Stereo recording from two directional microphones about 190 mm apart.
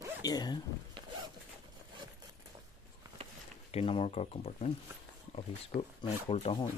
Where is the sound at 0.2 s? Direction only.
20° left (ahead or behind).